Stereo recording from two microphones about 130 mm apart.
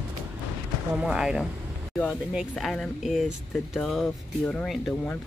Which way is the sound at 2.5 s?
5° left (ahead or behind).